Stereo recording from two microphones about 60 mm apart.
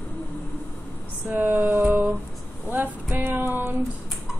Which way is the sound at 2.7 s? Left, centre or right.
Right.